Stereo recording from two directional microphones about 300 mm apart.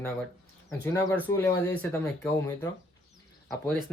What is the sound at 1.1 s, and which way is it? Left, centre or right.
Speech, centre.